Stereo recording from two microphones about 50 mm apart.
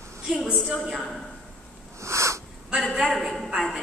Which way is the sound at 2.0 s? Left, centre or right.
Right.